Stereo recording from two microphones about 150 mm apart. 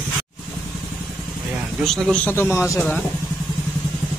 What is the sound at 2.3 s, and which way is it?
Speech, 15° left (ahead or behind).